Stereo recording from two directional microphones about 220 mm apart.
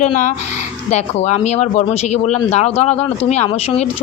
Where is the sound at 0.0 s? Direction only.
35° left (ahead or behind).